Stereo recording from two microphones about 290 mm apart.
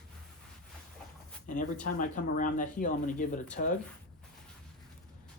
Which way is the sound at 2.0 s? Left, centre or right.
Left.